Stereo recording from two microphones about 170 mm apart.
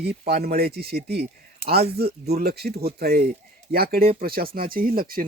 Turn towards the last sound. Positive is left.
turn(degrees=-55)  # may be behind; listen again after turning